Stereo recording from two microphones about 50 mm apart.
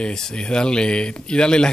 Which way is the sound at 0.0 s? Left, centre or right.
Centre.